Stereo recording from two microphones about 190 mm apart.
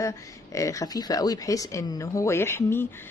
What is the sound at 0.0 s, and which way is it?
A woman's voice, 15° left (ahead or behind).